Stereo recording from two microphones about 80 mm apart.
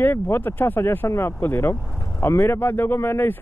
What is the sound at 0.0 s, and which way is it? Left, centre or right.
Speech, left.